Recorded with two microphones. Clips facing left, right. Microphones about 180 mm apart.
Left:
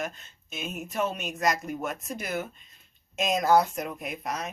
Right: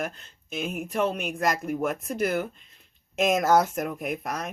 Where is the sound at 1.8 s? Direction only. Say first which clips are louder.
Right 7 dB; 55° right (ahead or behind).